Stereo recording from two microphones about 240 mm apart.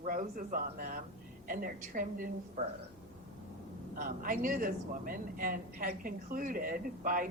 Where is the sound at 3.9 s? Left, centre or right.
Right.